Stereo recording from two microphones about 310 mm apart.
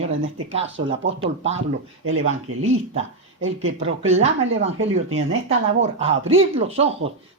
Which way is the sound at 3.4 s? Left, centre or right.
Right.